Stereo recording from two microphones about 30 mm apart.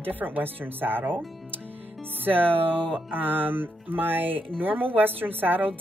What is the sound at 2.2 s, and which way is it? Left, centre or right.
Speech, right.